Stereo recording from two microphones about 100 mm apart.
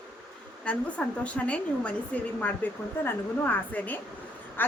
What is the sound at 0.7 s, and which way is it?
A woman's voice, 10° left (ahead or behind).